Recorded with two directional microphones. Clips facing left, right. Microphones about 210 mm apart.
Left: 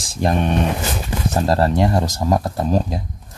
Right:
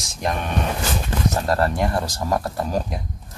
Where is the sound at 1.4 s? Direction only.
30° left (ahead or behind).